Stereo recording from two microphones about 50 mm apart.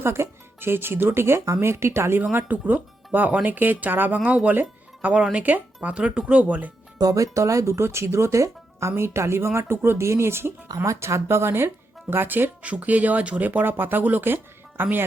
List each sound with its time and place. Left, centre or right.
0.0 s speech: right
2.5 s speech: right
4.2 s speech: right
4.5 s music: right
5.3 s speech: right
5.9 s speech: right
7.2 s speech: right
10.0 s speech: right
10.8 s speech: right
12.6 s speech: right